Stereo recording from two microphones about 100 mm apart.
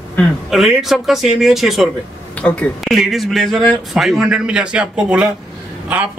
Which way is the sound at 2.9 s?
Centre (ahead or behind).